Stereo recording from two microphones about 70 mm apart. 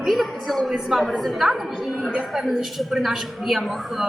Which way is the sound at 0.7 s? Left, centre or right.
Centre.